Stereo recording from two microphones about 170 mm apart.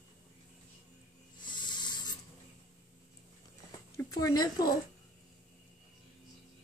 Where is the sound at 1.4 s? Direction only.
25° left (ahead or behind).